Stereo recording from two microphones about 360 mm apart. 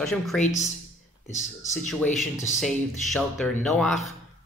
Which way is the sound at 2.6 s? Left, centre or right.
Centre.